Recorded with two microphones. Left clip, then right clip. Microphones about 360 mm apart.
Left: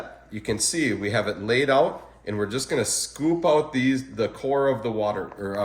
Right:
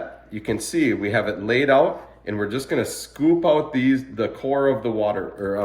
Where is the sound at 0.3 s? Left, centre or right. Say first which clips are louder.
Right 2 dB; left.